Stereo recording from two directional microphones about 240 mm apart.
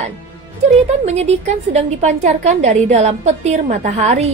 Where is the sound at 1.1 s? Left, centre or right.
Right.